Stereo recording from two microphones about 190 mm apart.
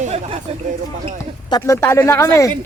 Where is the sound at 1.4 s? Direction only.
20° left (ahead or behind).